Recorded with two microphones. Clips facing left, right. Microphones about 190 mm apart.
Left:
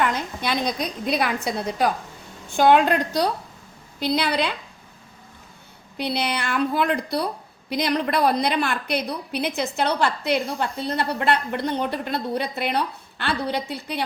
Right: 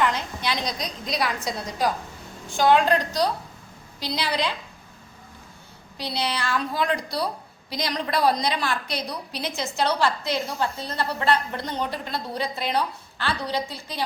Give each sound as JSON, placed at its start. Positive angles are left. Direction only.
{"t": 0.1, "sound": "a woman's voice", "side_deg": 55}
{"t": 6.0, "sound": "a woman's voice", "side_deg": 60}